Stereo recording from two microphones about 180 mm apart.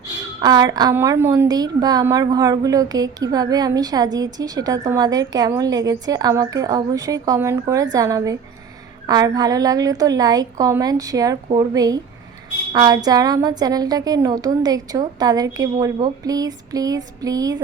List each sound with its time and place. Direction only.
0.4 s a woman's voice: 20° right (ahead or behind)